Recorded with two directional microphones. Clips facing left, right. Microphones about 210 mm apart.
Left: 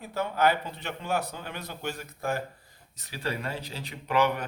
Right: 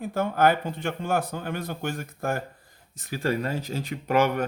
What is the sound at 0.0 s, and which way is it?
Speech, 50° right (ahead or behind).